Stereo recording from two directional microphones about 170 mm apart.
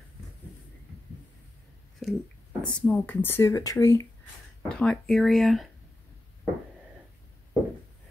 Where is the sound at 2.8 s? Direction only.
10° left (ahead or behind).